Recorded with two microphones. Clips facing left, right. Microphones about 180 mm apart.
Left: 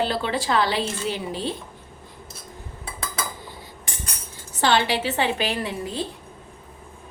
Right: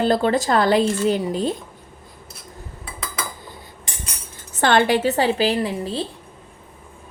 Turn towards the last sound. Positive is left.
turn(degrees=-30)  # may be behind; listen again after turning